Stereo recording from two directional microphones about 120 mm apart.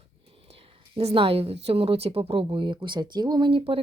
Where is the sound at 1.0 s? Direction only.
55° right (ahead or behind).